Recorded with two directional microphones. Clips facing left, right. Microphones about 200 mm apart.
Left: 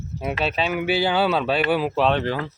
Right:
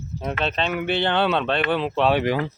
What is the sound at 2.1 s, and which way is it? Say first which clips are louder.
Speech: right 2 dB; 15° right (ahead or behind).